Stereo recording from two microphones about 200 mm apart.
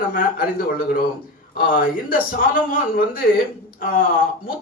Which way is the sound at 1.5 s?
45° left (ahead or behind).